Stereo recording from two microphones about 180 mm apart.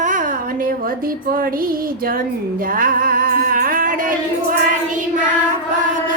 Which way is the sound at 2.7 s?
50° right (ahead or behind).